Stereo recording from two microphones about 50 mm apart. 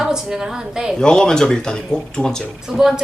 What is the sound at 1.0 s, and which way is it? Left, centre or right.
Speech, centre.